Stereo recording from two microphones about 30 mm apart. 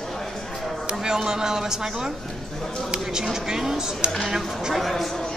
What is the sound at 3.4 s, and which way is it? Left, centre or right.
Speech, centre.